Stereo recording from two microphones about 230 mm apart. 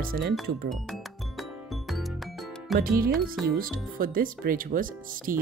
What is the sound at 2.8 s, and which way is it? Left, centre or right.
Speech, right.